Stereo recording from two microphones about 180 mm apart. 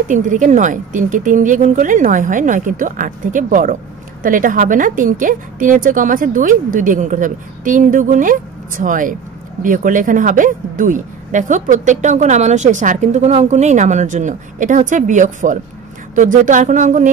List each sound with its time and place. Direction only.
0.1 s speech: 45° right (ahead or behind)